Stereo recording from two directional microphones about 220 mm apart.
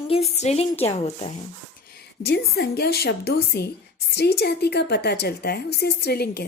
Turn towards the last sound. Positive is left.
turn(degrees=45)  # may be behind; listen again after turning